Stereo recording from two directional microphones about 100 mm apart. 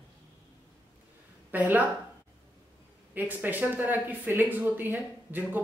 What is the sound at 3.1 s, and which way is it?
Speech, 20° right (ahead or behind).